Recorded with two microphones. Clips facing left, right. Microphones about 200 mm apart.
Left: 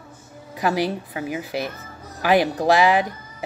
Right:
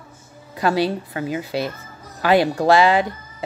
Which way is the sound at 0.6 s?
15° left (ahead or behind).